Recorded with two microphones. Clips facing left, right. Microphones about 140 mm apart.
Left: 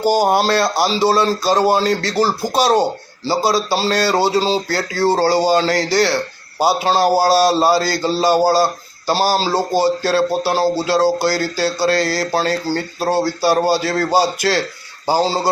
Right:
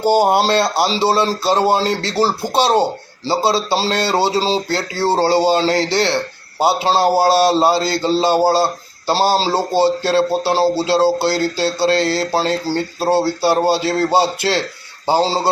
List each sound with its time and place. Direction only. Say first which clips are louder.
0.0 s a man's voice: right 1 dB; 25° right (ahead or behind)